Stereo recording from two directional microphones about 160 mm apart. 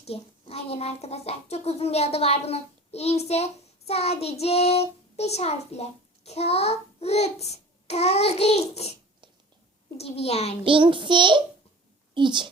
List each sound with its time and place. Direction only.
0.0 s a child's voice: 40° left (ahead or behind)
10.0 s a child's voice: 40° left (ahead or behind)
10.6 s a child's voice: 30° right (ahead or behind)